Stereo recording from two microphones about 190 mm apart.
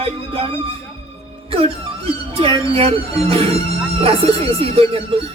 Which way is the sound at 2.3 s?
30° right (ahead or behind).